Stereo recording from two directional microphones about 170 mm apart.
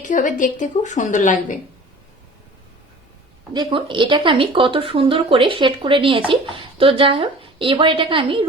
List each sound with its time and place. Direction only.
0.0 s a woman's voice: 50° left (ahead or behind)
3.5 s speech: 25° right (ahead or behind)